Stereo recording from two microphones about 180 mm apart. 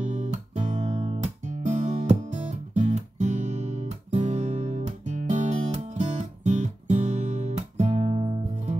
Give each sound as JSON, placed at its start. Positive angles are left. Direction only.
{"t": 0.0, "sound": "music", "side_deg": -40}